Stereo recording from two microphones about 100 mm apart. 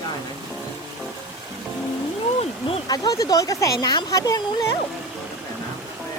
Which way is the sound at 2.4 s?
75° left (ahead or behind).